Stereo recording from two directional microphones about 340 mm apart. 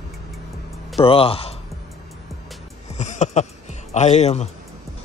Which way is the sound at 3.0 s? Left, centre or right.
Left.